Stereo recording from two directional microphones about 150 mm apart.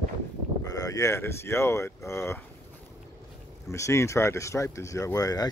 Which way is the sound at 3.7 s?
20° left (ahead or behind).